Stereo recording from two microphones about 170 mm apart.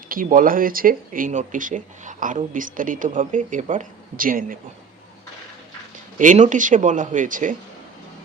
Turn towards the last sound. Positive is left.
turn(degrees=-50)  # may be behind; listen again after turning